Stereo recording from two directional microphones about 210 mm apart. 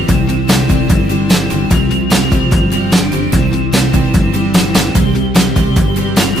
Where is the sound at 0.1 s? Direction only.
Centre (ahead or behind).